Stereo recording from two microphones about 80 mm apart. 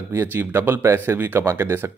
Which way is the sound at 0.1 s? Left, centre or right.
Right.